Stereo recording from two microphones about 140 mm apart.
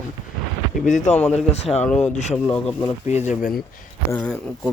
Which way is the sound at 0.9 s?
60° left (ahead or behind).